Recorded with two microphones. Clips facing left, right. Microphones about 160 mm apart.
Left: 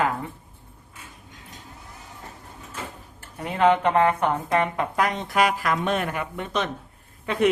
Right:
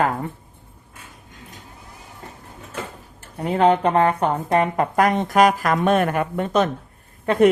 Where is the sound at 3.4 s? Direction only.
35° right (ahead or behind).